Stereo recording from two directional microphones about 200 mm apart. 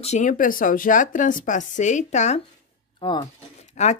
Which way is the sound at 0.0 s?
35° left (ahead or behind).